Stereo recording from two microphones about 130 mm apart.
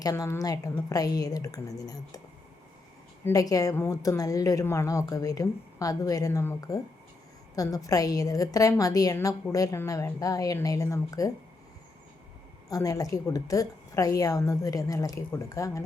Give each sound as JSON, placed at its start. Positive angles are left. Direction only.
{"t": 0.0, "sound": "a woman's voice", "side_deg": 25}
{"t": 3.2, "sound": "a woman's voice", "side_deg": 30}
{"t": 12.6, "sound": "a woman's voice", "side_deg": 25}